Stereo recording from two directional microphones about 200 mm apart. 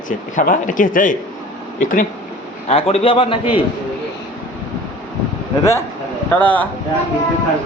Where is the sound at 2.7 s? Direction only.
30° left (ahead or behind).